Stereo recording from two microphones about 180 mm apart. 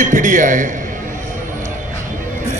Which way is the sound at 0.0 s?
45° right (ahead or behind).